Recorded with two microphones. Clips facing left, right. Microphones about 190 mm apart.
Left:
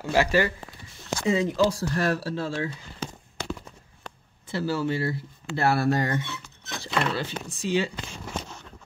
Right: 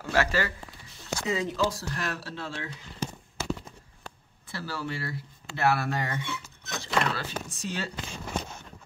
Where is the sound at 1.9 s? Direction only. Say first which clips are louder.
Left 9 dB; 35° left (ahead or behind).